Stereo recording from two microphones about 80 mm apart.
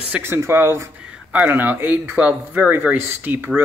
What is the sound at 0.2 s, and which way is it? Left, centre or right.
Speech, right.